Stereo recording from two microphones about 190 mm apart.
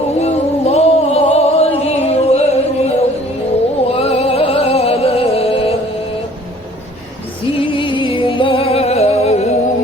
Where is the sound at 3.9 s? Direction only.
30° left (ahead or behind).